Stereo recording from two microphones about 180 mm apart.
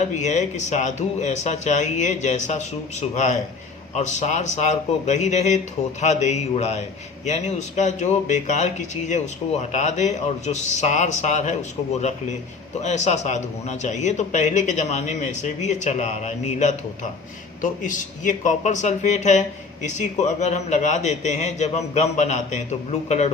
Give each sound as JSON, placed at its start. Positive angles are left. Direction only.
{"t": 0.2, "sound": "speech", "side_deg": 40}
{"t": 12.8, "sound": "speech", "side_deg": 40}